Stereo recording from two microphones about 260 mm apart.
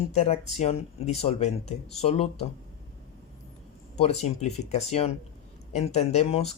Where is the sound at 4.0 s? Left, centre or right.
Left.